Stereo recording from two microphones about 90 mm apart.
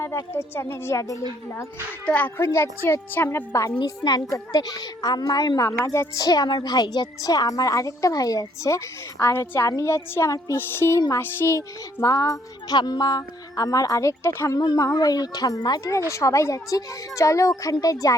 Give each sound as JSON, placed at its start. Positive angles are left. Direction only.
{"t": 0.3, "sound": "a child's voice", "side_deg": 30}
{"t": 2.0, "sound": "speech", "side_deg": 15}
{"t": 2.4, "sound": "speech", "side_deg": 30}
{"t": 3.8, "sound": "a woman's voice", "side_deg": 50}
{"t": 5.6, "sound": "a child's voice", "side_deg": 35}
{"t": 6.1, "sound": "a child's voice", "side_deg": 50}
{"t": 12.7, "sound": "a child's voice", "side_deg": 50}
{"t": 14.9, "sound": "a woman's voice", "side_deg": 45}
{"t": 16.0, "sound": "a child's voice", "side_deg": 35}